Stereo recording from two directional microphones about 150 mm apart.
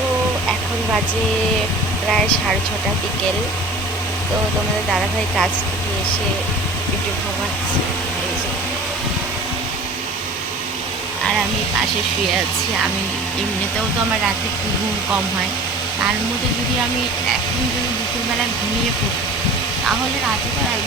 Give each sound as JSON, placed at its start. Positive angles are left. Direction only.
{"t": 4.9, "sound": "speech", "side_deg": 0}